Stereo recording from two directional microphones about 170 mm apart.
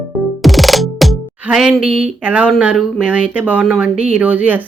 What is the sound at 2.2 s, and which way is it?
Speech, 5° right (ahead or behind).